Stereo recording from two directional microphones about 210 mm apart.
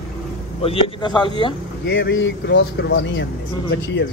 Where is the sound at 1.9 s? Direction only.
60° left (ahead or behind).